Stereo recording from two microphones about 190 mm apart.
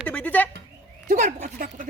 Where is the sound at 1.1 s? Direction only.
40° right (ahead or behind).